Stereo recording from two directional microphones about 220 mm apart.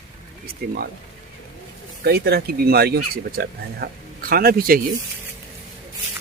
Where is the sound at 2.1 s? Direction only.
45° right (ahead or behind).